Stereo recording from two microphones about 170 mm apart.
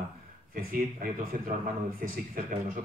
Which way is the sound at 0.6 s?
55° right (ahead or behind).